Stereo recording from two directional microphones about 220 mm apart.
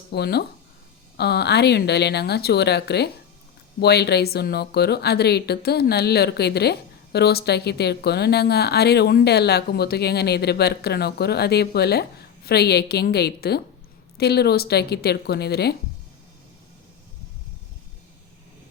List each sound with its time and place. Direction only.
0.1 s speech: 45° left (ahead or behind)